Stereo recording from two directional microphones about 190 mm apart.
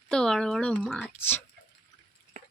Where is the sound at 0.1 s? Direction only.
5° left (ahead or behind).